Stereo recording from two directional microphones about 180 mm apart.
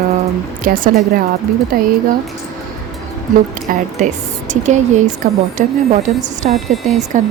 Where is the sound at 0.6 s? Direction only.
50° right (ahead or behind).